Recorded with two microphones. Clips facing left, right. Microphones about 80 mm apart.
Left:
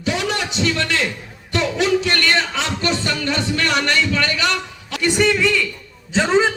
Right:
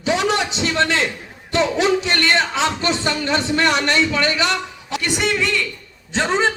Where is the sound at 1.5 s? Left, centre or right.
Right.